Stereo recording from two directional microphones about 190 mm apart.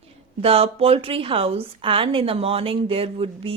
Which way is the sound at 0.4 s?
30° right (ahead or behind).